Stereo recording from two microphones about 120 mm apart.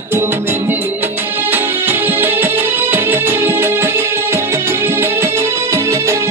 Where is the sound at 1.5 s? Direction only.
15° right (ahead or behind).